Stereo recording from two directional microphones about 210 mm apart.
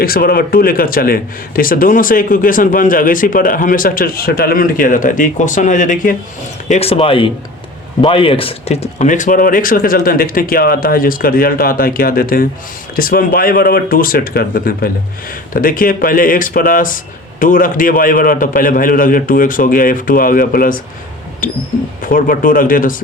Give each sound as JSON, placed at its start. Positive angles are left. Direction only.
{"t": 0.0, "sound": "a man's voice", "side_deg": 45}